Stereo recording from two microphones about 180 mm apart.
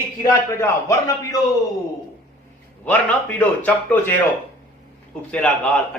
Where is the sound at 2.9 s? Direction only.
10° left (ahead or behind).